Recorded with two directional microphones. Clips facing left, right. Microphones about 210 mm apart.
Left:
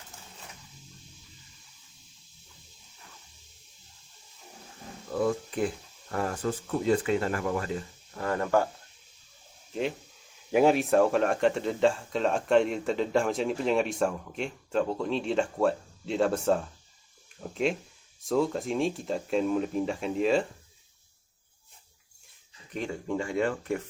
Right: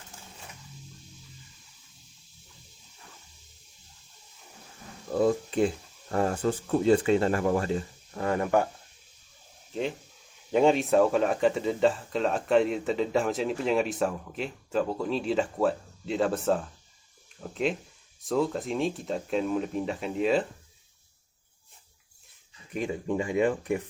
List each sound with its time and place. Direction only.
5.1 s speech: 25° right (ahead or behind)
8.2 s speech: 20° right (ahead or behind)
10.5 s speech: 5° left (ahead or behind)
22.7 s speech: 15° right (ahead or behind)